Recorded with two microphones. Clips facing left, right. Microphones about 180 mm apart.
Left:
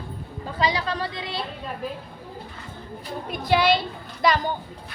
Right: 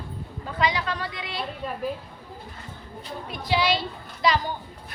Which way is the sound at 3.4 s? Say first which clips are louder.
Left 4 dB; 55° left (ahead or behind).